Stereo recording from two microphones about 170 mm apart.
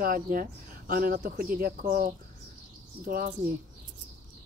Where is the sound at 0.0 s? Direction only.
55° right (ahead or behind).